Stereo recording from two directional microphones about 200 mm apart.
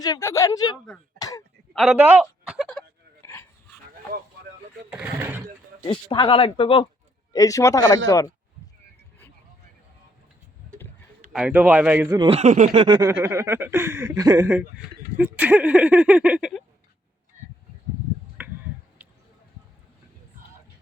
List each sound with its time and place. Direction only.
0.0 s speech: 15° left (ahead or behind)
1.2 s throat clearing: 15° left (ahead or behind)
1.7 s speech: centre (ahead or behind)
4.9 s speech: 5° right (ahead or behind)
5.9 s speech: 25° left (ahead or behind)
11.3 s speech: 5° right (ahead or behind)
12.2 s a sound: 30° right (ahead or behind)
13.0 s speech: 10° right (ahead or behind)
18.4 s finger snapping: 10° right (ahead or behind)